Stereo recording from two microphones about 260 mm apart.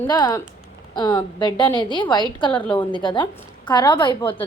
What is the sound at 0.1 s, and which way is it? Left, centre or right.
A woman's voice, centre.